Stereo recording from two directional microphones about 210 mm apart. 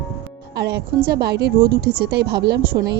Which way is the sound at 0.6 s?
50° right (ahead or behind).